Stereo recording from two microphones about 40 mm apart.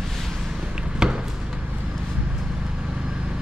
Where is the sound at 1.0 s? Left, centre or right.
Centre.